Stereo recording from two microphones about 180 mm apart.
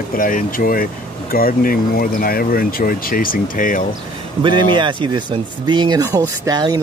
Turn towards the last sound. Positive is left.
turn(degrees=-20)  # may be behind; listen again after turning